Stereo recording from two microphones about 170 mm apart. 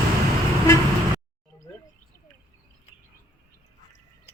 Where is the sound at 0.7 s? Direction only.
15° left (ahead or behind).